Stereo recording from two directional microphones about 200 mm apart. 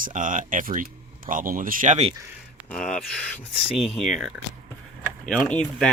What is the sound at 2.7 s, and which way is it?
Speech, 5° left (ahead or behind).